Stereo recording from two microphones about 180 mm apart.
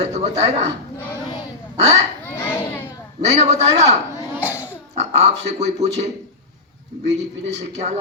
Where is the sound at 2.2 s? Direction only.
10° left (ahead or behind).